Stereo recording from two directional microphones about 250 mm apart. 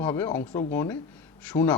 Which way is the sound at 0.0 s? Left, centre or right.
Centre.